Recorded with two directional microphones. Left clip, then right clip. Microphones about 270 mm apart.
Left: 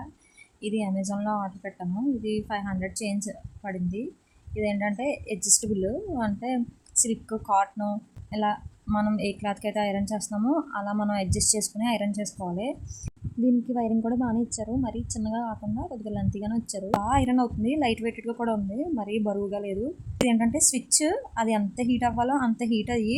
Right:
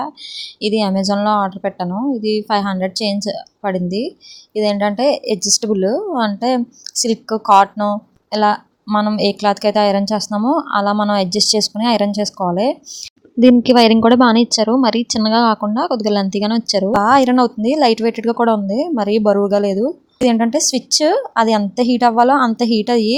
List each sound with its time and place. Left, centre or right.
0.6 s speech: centre